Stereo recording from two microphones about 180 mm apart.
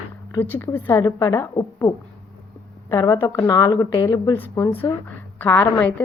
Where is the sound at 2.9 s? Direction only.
15° left (ahead or behind).